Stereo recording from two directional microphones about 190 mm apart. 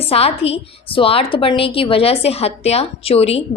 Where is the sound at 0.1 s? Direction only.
30° left (ahead or behind).